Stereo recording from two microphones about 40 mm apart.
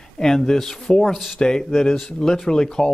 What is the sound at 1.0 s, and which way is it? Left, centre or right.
Speech, centre.